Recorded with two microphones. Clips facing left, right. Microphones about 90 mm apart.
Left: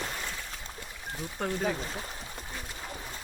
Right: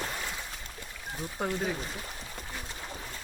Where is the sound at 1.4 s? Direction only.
5° right (ahead or behind).